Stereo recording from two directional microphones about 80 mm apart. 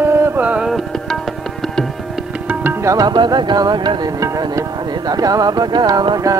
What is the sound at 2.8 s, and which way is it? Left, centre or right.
Music, right.